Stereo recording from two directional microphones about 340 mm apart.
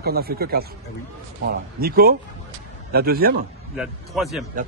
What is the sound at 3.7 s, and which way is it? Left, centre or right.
Speech, centre.